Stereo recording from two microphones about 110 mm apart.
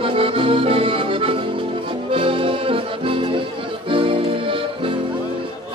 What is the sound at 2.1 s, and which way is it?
Accordion, 55° right (ahead or behind).